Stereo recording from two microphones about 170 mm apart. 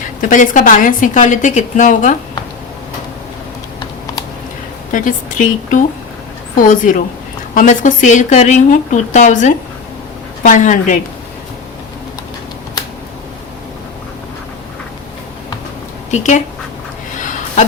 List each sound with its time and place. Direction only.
0.2 s a woman's voice: 50° left (ahead or behind)
4.9 s a woman's voice: 50° left (ahead or behind)
16.1 s a woman's voice: 45° left (ahead or behind)
17.2 s a sound: 45° left (ahead or behind)